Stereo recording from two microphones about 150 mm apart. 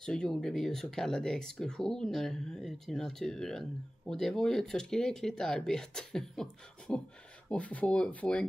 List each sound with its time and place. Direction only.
0.0 s speech: 5° left (ahead or behind)